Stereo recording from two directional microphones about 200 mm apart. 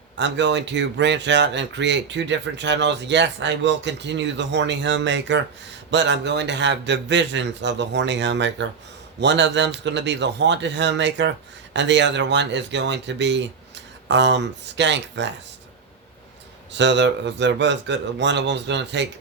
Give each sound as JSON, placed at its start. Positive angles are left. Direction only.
{"t": 0.2, "sound": "speech", "side_deg": -60}
{"t": 16.7, "sound": "speech", "side_deg": -60}